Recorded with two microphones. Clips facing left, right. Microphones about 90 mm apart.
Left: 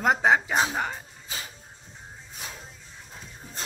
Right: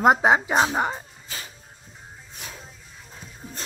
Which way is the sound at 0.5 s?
30° right (ahead or behind).